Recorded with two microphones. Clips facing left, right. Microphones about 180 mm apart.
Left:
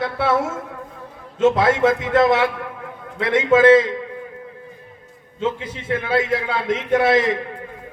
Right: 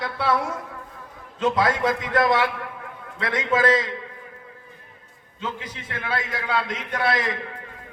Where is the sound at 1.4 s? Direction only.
25° left (ahead or behind).